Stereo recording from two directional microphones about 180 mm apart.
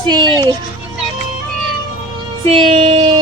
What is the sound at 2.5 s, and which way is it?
Music, 35° right (ahead or behind).